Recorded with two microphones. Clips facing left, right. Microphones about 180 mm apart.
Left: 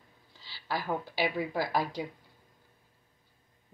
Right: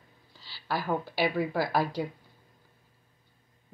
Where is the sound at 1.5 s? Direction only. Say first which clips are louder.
Right 3 dB; 55° right (ahead or behind).